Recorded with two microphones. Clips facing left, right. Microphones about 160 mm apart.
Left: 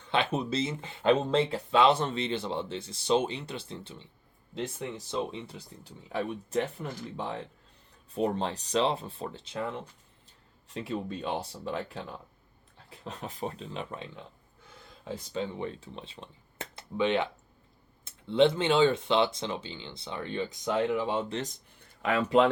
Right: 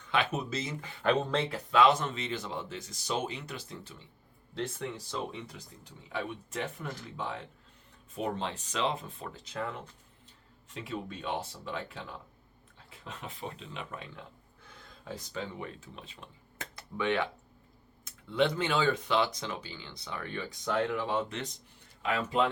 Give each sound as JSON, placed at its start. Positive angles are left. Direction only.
{"t": 0.0, "sound": "speech", "side_deg": 30}
{"t": 10.8, "sound": "speech", "side_deg": 35}
{"t": 13.1, "sound": "speech", "side_deg": 40}
{"t": 21.2, "sound": "speech", "side_deg": 35}
{"t": 22.0, "sound": "speech", "side_deg": 65}